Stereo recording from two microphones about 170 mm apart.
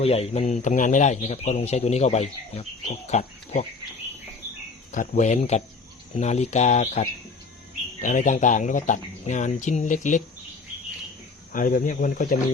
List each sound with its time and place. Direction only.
0.0 s speech: 35° left (ahead or behind)
4.9 s speech: 50° left (ahead or behind)
11.5 s speech: 55° left (ahead or behind)